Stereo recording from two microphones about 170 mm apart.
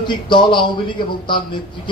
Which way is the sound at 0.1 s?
30° left (ahead or behind).